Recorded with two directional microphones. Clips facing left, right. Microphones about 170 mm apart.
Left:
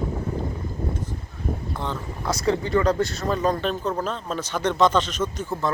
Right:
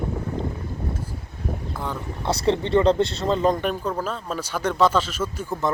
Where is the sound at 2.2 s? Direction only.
30° right (ahead or behind).